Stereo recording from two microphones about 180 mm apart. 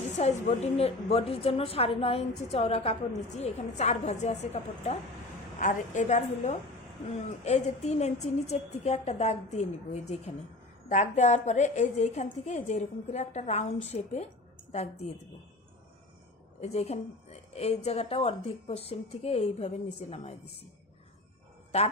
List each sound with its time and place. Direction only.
0.2 s a woman's voice: 35° left (ahead or behind)
16.6 s a woman's voice: 35° left (ahead or behind)
21.7 s a woman's voice: 35° left (ahead or behind)